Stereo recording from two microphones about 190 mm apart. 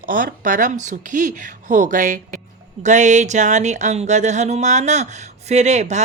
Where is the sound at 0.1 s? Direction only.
45° right (ahead or behind).